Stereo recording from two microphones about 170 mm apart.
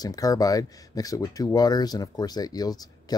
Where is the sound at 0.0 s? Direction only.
20° left (ahead or behind).